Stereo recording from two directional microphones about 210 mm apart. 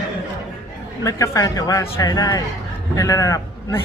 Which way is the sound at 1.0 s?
15° left (ahead or behind).